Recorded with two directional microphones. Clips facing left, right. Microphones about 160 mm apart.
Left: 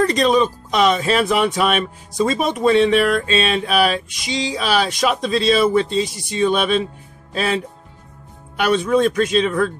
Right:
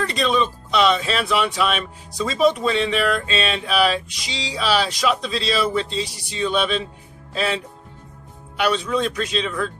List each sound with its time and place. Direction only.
0.0 s speech: 40° left (ahead or behind)